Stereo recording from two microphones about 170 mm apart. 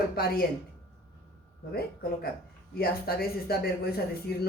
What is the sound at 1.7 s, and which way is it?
A woman's voice, 65° left (ahead or behind).